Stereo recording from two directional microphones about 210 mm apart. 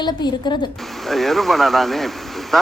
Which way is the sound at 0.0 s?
20° left (ahead or behind).